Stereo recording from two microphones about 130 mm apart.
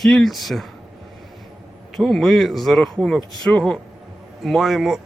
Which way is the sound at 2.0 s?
Centre (ahead or behind).